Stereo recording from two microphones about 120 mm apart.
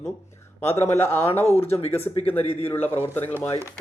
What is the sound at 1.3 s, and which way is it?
Speech, 20° left (ahead or behind).